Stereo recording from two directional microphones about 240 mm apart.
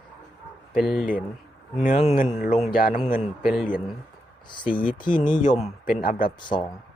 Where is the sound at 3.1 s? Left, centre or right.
Centre.